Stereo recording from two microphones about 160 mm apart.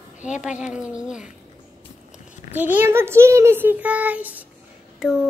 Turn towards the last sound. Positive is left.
turn(degrees=-5)  # may be behind; listen again after turning